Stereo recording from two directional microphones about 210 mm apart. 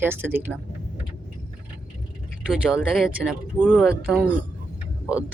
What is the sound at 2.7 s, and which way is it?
Speech, 5° right (ahead or behind).